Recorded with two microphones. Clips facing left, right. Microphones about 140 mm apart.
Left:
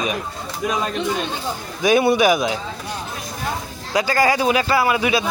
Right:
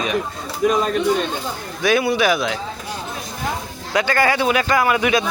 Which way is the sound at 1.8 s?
20° left (ahead or behind).